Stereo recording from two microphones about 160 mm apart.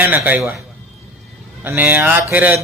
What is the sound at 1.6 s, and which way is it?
Speech, 10° right (ahead or behind).